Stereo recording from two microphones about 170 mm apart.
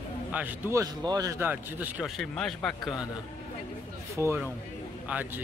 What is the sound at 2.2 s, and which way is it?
Speech, 5° left (ahead or behind).